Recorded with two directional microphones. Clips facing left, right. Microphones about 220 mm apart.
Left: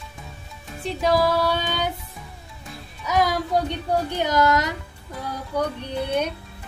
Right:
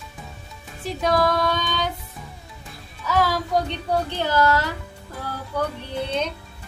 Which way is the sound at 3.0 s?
15° left (ahead or behind).